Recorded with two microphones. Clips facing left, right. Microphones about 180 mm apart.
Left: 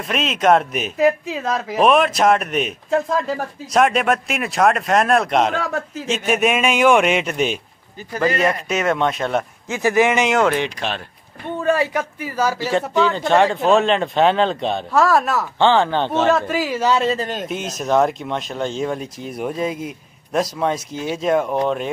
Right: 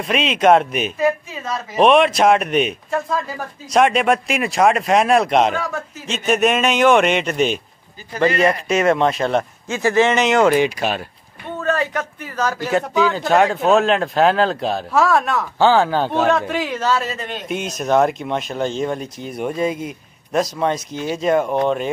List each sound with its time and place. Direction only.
0.0 s speech: centre (ahead or behind)
1.3 s speech: 90° left
1.8 s speech: centre (ahead or behind)
3.7 s speech: centre (ahead or behind)
9.7 s a man's voice: 15° left (ahead or behind)
10.4 s speech: 5° right (ahead or behind)
11.6 s a man's voice: 10° left (ahead or behind)
12.6 s speech: 5° right (ahead or behind)
16.9 s speech: 25° left (ahead or behind)
17.6 s speech: centre (ahead or behind)